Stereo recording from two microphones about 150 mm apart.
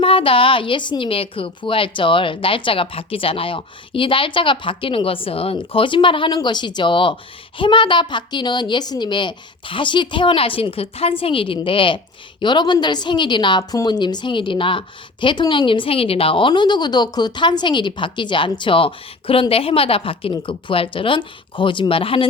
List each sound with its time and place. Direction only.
0.0 s a woman's voice: 35° left (ahead or behind)